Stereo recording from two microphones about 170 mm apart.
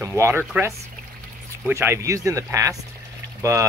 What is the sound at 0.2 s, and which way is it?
Speech, 10° right (ahead or behind).